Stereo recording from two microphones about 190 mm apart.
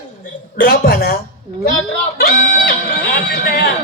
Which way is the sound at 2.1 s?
50° left (ahead or behind).